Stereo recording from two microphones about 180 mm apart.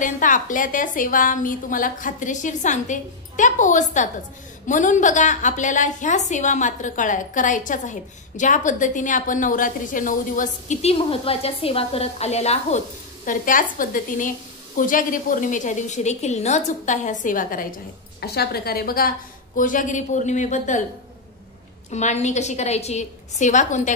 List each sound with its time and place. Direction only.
0.0 s a woman's voice: 45° left (ahead or behind)
18.2 s a woman's voice: 60° left (ahead or behind); by 20.8 s 45° left (ahead or behind)
21.9 s a woman's voice: 40° left (ahead or behind)